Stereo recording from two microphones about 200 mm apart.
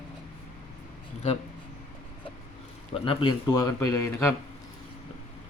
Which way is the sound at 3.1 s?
25° left (ahead or behind).